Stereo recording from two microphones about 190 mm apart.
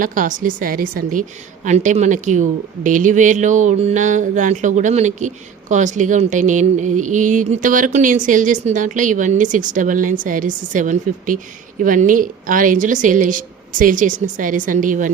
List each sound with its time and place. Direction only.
0.0 s a woman's voice: 45° right (ahead or behind)